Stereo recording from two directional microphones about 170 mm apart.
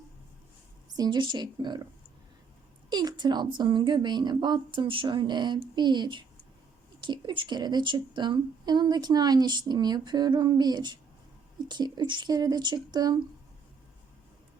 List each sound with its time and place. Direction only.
0.9 s speech: 25° right (ahead or behind)
2.9 s speech: 25° right (ahead or behind)